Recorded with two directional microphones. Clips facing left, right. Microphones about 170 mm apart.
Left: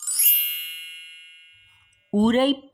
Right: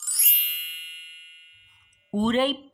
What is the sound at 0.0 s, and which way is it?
Ding, centre (ahead or behind).